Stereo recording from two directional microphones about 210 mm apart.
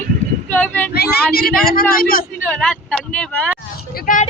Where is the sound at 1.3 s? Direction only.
50° left (ahead or behind).